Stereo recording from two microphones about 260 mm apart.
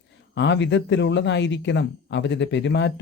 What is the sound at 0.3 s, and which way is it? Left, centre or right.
Speech, left.